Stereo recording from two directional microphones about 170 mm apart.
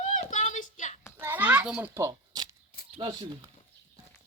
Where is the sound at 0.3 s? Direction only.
50° left (ahead or behind).